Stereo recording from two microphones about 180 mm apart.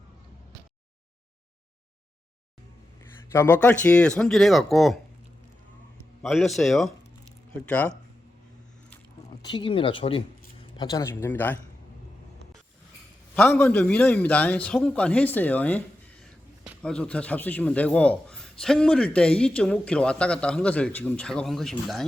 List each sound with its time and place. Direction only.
3.3 s a man's voice: 15° left (ahead or behind)
6.2 s a man's voice: centre (ahead or behind)
9.4 s speech: 25° left (ahead or behind)
10.8 s a man's voice: 20° left (ahead or behind)
13.3 s a man's voice: 10° left (ahead or behind)
16.8 s a man's voice: 5° left (ahead or behind)